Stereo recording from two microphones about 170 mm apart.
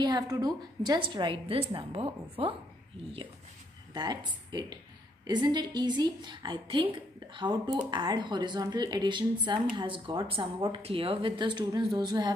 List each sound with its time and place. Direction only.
0.0 s speech: 25° right (ahead or behind)
3.9 s speech: 25° right (ahead or behind)